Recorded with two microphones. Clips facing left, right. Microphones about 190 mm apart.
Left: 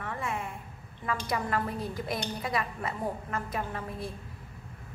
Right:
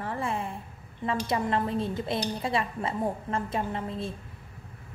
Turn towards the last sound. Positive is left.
turn(degrees=-25)  # may be behind; listen again after turning